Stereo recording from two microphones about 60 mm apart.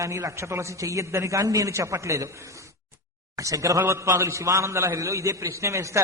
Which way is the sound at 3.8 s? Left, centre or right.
Right.